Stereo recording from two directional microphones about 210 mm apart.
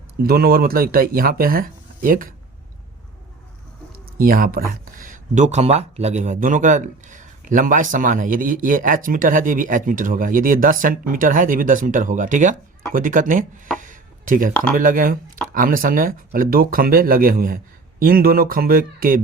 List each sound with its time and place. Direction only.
0.2 s speech: 45° right (ahead or behind)
4.2 s speech: 45° right (ahead or behind)
13.7 s a sound: 40° right (ahead or behind)
14.8 s speech: 40° right (ahead or behind)